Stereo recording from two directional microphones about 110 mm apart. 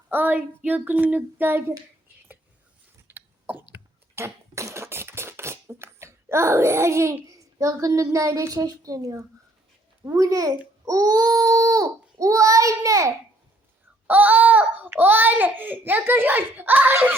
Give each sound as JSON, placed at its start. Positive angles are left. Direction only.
{"t": 0.1, "sound": "a child's voice", "side_deg": -15}
{"t": 3.1, "sound": "cough", "side_deg": -15}
{"t": 10.0, "sound": "a child's voice", "side_deg": -30}
{"t": 14.1, "sound": "a child's voice", "side_deg": -15}